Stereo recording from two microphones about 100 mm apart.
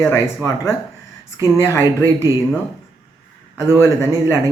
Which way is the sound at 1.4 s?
25° left (ahead or behind).